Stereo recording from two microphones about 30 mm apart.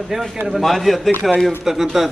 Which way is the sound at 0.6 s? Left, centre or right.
Centre.